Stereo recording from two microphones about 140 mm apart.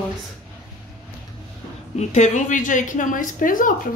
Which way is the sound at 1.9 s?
55° left (ahead or behind).